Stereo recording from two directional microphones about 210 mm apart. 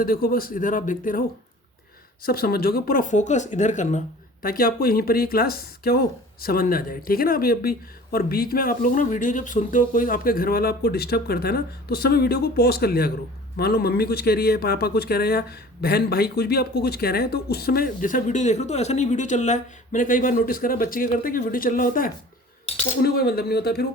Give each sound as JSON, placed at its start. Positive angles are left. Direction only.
{"t": 0.0, "sound": "speech", "side_deg": 45}
{"t": 2.2, "sound": "speech", "side_deg": 45}